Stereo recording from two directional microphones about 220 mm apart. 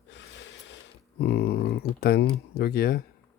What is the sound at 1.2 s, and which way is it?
Speech, 45° left (ahead or behind).